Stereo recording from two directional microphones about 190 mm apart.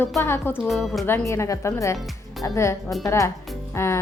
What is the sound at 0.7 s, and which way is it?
Speech, centre (ahead or behind).